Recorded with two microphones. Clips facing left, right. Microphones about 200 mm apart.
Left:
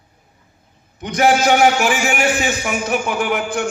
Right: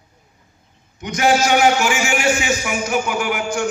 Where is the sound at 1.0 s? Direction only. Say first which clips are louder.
Left 2 dB; 35° left (ahead or behind).